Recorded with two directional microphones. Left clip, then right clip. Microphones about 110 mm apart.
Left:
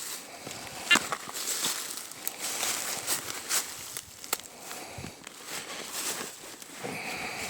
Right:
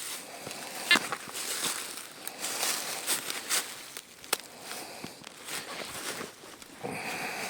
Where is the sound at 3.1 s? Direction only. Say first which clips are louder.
Right 3 dB; 10° left (ahead or behind).